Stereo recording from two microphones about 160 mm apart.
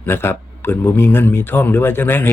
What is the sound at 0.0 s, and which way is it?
A man's voice, 15° left (ahead or behind).